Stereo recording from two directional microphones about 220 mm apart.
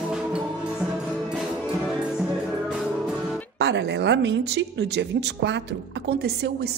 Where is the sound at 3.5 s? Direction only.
50° right (ahead or behind).